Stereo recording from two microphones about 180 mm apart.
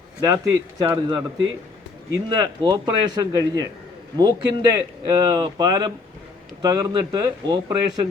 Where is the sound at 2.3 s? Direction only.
20° right (ahead or behind).